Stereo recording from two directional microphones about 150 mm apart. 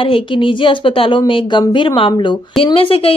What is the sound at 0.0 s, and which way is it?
Speech, 35° left (ahead or behind).